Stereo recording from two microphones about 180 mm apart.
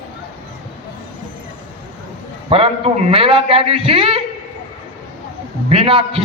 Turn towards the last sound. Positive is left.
turn(degrees=-30)  # may be behind; listen again after turning